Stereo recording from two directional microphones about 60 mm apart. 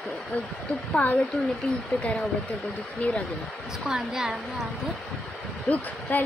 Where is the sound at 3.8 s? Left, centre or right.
Centre.